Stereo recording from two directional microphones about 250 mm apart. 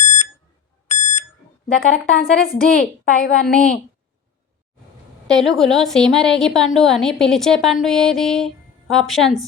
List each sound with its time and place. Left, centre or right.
0.0 s alarm: left
1.6 s a woman's voice: left
5.3 s a woman's voice: centre